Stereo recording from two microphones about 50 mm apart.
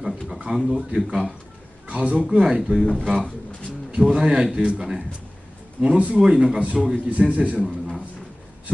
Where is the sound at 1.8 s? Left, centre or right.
Right.